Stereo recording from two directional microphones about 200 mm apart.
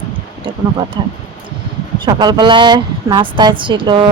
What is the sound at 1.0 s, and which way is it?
A woman's voice, 20° right (ahead or behind).